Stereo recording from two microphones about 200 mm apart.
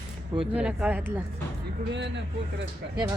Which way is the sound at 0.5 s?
5° right (ahead or behind).